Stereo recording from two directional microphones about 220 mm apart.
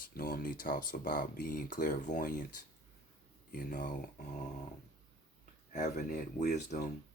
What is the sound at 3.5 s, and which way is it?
Speech, 40° left (ahead or behind).